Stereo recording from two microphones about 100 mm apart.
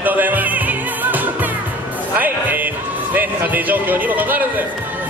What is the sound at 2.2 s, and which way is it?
Speech, 15° right (ahead or behind).